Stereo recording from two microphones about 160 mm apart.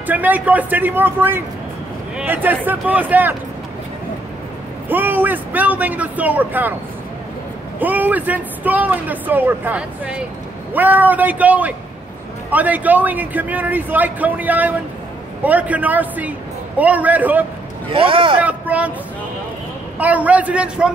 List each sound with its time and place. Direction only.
0.0 s speech: 10° right (ahead or behind)
4.8 s speech: 10° right (ahead or behind)
7.8 s speech: 10° right (ahead or behind)
17.8 s speech: 35° right (ahead or behind)
18.4 s speech: 10° right (ahead or behind)
20.0 s speech: 10° right (ahead or behind)